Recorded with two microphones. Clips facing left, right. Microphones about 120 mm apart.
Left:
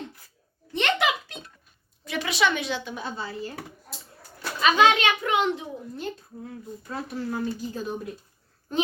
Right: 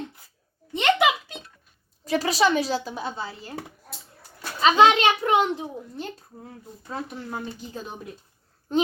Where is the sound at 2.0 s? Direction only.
35° right (ahead or behind).